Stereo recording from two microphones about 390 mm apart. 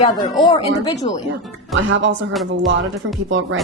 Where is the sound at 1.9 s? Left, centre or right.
Right.